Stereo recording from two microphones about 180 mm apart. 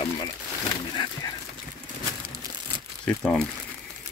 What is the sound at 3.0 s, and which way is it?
Crumpling, 5° left (ahead or behind).